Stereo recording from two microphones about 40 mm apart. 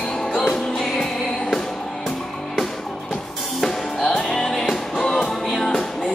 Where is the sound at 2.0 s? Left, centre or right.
Centre.